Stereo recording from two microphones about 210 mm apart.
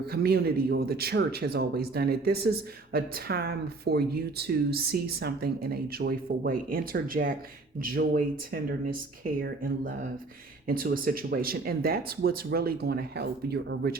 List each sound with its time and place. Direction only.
0.1 s speech: 50° right (ahead or behind)